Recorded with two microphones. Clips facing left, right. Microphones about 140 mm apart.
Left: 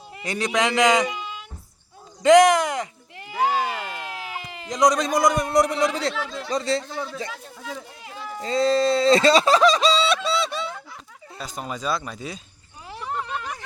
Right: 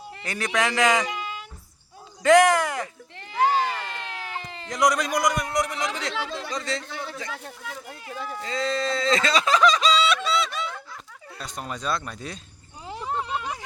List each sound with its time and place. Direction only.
0.2 s a man's voice: 20° left (ahead or behind)
1.0 s a sound: centre (ahead or behind)
2.2 s speech: 20° left (ahead or behind)
8.4 s speech: 35° left (ahead or behind)
11.3 s speech: centre (ahead or behind)
12.9 s a sound: 20° right (ahead or behind)